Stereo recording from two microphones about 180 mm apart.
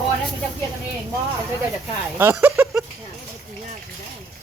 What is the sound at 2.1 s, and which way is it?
Speech, 10° right (ahead or behind).